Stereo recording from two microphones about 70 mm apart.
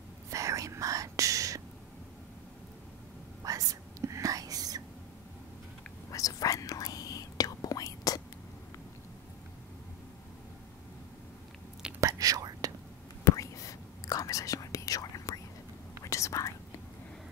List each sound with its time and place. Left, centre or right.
0.3 s whispering: right
3.4 s whispering: right
6.0 s whispering: left
12.0 s whispering: right
13.2 s whispering: left